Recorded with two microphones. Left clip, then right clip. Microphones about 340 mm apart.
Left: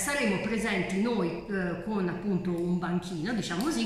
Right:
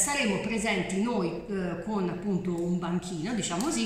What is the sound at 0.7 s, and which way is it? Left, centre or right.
A man's voice, centre.